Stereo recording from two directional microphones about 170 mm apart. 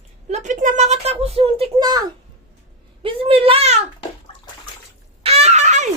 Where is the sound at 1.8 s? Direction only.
25° right (ahead or behind).